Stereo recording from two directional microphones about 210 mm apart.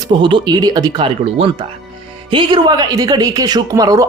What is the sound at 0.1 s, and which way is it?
Speech, 25° right (ahead or behind).